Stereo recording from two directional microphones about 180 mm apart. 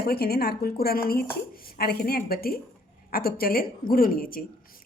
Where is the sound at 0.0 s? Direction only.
60° left (ahead or behind).